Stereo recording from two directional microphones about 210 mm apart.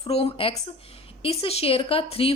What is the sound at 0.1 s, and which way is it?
A woman's voice, 30° left (ahead or behind).